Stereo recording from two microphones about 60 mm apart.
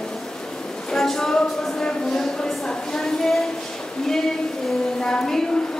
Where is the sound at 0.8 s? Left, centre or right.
Centre.